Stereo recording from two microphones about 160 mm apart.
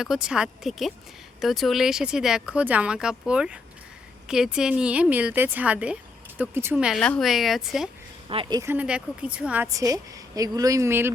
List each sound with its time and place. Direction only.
0.0 s speech: 5° right (ahead or behind)
7.0 s speech: 5° left (ahead or behind)
8.3 s a woman's voice: 30° right (ahead or behind)
8.7 s speech: 10° right (ahead or behind)
9.7 s a woman's voice: 20° right (ahead or behind)